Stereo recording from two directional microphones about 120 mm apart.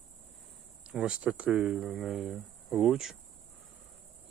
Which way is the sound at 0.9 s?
5° right (ahead or behind).